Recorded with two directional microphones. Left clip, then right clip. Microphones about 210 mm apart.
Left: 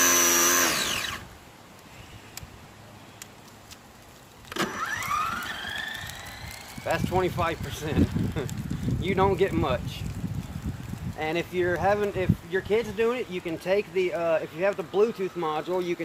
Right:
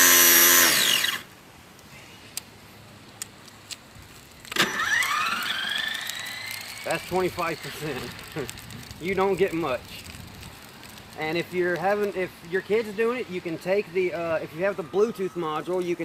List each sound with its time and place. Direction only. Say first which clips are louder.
0.0 s tools: right 4 dB; centre (ahead or behind)
4.5 s car: right 6 dB; 5° right (ahead or behind)
4.9 s police car: right 2 dB; 10° left (ahead or behind)
6.8 s speech: even; 35° right (ahead or behind)
9.0 s speech: even; 30° right (ahead or behind)
11.2 s speech: right 1 dB; 35° right (ahead or behind)